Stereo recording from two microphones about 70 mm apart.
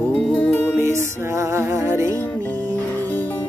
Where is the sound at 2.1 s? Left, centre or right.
Left.